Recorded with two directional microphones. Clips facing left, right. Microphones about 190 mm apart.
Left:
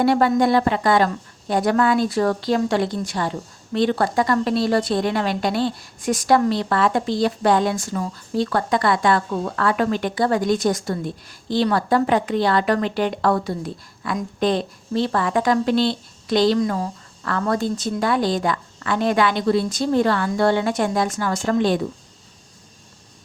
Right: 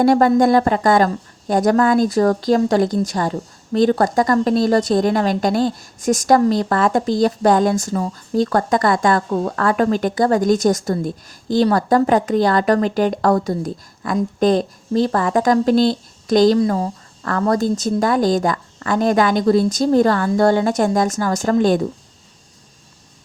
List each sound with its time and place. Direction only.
0.0 s a woman's voice: 45° right (ahead or behind)